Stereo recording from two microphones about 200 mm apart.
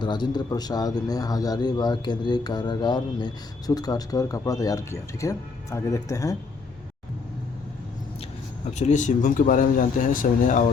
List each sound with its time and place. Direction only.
0.0 s a man's voice: 20° left (ahead or behind)
8.7 s speech: 35° left (ahead or behind)